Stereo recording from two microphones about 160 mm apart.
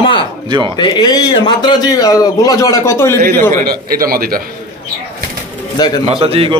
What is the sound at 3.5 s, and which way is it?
Speech, 65° right (ahead or behind).